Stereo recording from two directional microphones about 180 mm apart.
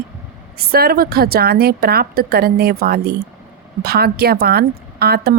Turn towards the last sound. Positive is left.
turn(degrees=-60)  # may be behind; listen again after turning